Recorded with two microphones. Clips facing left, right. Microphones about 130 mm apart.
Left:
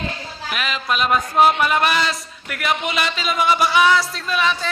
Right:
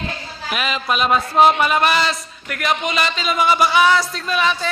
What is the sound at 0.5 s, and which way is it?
A man's voice, 10° right (ahead or behind).